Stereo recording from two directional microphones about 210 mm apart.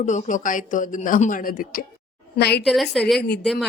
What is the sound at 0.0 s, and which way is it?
Speech, 35° left (ahead or behind).